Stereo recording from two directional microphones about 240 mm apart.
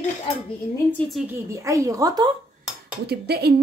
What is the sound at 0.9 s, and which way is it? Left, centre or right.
Speech, centre.